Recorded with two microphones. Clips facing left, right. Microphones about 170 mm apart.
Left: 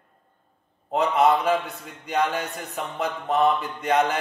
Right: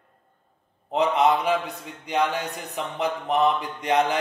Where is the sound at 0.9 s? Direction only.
15° right (ahead or behind).